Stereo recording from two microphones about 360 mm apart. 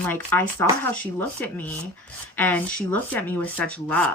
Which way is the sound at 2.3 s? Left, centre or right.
Centre.